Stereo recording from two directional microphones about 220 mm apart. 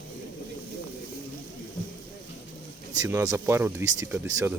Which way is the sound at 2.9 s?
10° right (ahead or behind).